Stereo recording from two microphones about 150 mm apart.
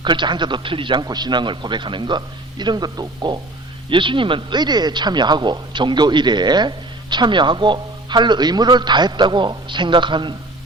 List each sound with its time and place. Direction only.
0.0 s speech: 30° right (ahead or behind)